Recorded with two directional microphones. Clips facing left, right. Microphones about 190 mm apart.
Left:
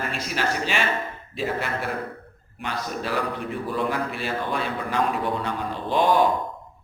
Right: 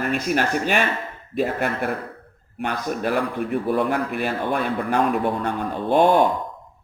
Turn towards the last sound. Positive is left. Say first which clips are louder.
# right 4 dB
turn(degrees=-55)  # may be behind; listen again after turning